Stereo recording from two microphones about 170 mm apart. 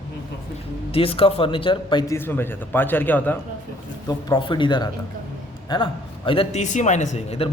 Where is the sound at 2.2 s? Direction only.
10° left (ahead or behind).